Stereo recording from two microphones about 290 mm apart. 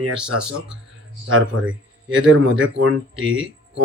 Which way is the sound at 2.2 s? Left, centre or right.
Right.